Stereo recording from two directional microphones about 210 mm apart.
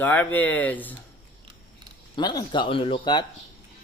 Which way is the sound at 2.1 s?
20° left (ahead or behind).